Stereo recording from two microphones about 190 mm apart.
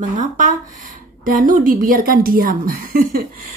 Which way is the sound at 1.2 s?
45° right (ahead or behind).